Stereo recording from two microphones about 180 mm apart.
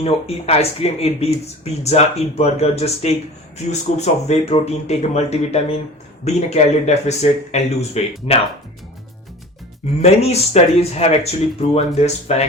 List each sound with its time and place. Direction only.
0.0 s speech: 35° left (ahead or behind)
10.0 s speech: 35° left (ahead or behind)